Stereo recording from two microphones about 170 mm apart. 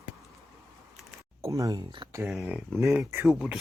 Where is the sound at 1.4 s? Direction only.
20° right (ahead or behind).